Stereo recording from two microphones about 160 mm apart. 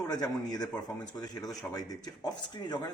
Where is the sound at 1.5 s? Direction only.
Centre (ahead or behind).